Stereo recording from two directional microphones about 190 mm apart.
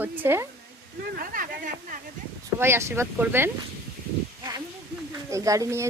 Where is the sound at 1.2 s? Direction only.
45° right (ahead or behind).